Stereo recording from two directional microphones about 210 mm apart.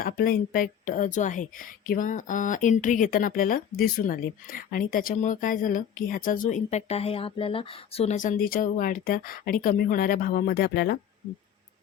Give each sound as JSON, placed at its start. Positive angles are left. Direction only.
{"t": 0.0, "sound": "speech", "side_deg": 45}